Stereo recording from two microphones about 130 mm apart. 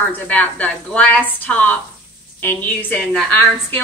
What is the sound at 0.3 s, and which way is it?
A woman's voice, 10° left (ahead or behind).